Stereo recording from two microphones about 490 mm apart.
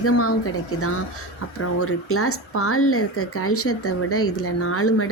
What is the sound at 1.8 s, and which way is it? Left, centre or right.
Speech, left.